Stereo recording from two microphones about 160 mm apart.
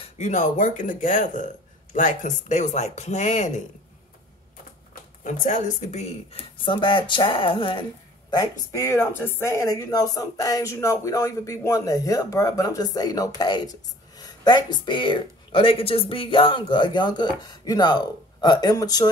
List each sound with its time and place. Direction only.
0.0 s speech: 45° left (ahead or behind)
5.2 s a woman's voice: 55° left (ahead or behind); by 19.0 s 25° left (ahead or behind)